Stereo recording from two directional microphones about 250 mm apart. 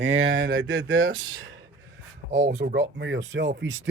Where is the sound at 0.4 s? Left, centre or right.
Right.